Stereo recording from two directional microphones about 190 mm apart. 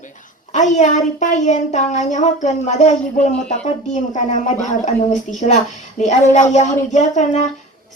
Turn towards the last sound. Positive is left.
turn(degrees=40)  # may be behind; listen again after turning